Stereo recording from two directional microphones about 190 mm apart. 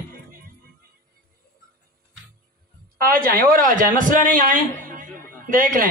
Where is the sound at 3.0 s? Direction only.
50° right (ahead or behind).